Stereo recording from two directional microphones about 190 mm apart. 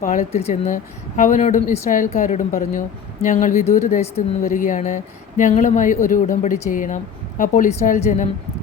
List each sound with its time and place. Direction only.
0.0 s a woman's voice: 45° left (ahead or behind)